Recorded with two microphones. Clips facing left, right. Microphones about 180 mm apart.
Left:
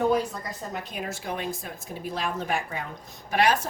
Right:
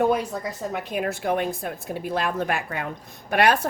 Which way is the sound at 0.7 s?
60° right (ahead or behind).